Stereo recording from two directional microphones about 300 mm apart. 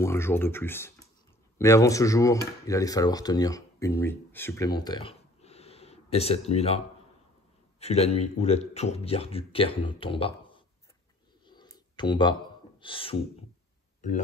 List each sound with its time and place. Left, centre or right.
0.0 s speech: centre
7.8 s speech: left
11.4 s a sound: centre
12.8 s speech: centre